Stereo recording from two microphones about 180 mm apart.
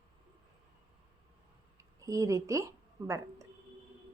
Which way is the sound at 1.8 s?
20° right (ahead or behind).